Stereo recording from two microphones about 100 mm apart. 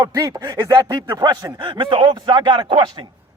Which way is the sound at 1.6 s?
55° right (ahead or behind).